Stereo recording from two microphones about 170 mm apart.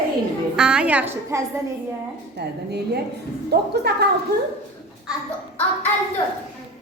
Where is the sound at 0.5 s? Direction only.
5° right (ahead or behind).